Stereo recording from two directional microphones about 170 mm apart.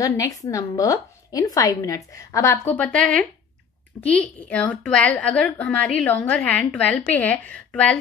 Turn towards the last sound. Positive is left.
turn(degrees=5)  # may be behind; listen again after turning